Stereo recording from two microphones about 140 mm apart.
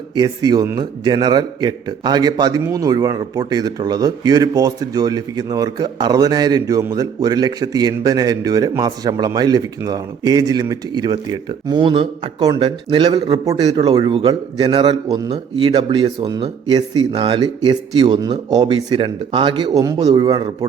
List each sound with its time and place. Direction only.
0.2 s a man's voice: 25° right (ahead or behind)